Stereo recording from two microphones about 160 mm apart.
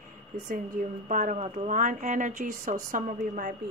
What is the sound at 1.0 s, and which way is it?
Speech, 50° right (ahead or behind).